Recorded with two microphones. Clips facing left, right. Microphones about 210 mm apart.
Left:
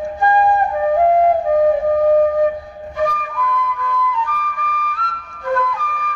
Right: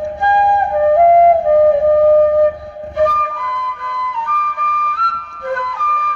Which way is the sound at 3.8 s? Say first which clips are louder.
Left 4 dB; 65° right (ahead or behind).